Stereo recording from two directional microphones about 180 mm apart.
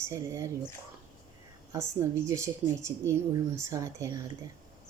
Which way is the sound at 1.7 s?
15° right (ahead or behind).